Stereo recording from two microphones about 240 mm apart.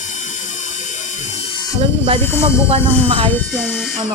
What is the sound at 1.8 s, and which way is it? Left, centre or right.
Speech, right.